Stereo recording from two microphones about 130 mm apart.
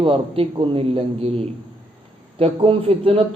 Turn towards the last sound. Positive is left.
turn(degrees=-45)  # may be behind; listen again after turning